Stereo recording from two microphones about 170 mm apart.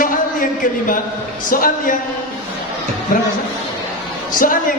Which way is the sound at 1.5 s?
55° left (ahead or behind).